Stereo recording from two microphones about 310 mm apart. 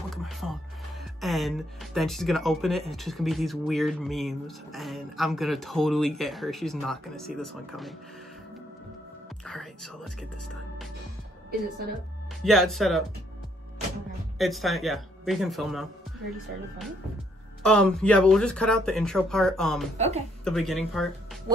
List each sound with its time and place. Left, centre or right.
0.1 s music: centre
1.2 s speech: centre
9.4 s speech: centre
12.4 s speech: centre
14.4 s speech: centre
17.6 s speech: centre
20.0 s speech: right
20.4 s speech: centre